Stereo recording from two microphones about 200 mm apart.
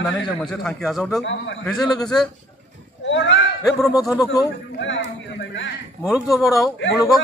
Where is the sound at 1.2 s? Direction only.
65° left (ahead or behind).